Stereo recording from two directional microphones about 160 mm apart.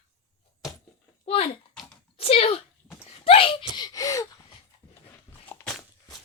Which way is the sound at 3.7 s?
25° left (ahead or behind).